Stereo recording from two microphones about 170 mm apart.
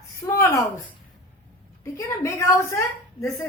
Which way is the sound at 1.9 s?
15° left (ahead or behind).